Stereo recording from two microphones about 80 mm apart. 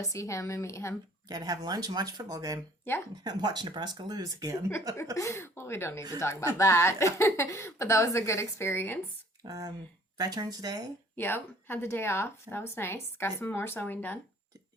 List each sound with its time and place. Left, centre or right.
0.0 s a woman's voice: left
1.3 s speech: right
3.2 s speech: right
5.1 s a woman's voice: left
9.4 s speech: right
11.2 s speech: left